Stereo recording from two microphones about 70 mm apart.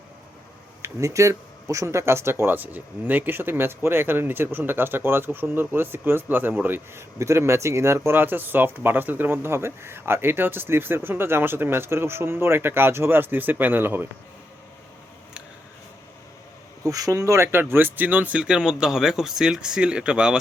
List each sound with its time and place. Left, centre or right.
0.8 s speech: right
7.2 s speech: right
16.8 s speech: right
17.4 s speech: right; by 20.4 s centre